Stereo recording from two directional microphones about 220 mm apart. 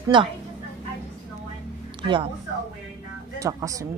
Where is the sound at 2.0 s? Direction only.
20° right (ahead or behind).